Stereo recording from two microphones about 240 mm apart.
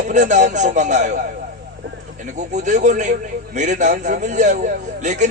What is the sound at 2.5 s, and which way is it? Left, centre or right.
A man's voice, right.